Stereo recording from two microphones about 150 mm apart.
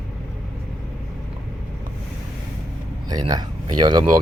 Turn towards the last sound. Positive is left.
turn(degrees=-30)  # may be behind; listen again after turning